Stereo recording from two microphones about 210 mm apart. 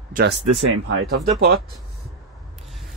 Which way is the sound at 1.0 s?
50° right (ahead or behind).